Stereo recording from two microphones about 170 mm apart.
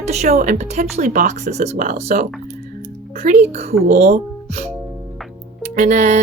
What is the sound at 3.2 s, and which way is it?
Speech, 45° right (ahead or behind).